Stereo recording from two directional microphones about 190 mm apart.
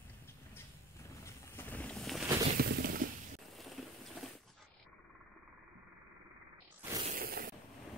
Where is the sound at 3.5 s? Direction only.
Centre (ahead or behind).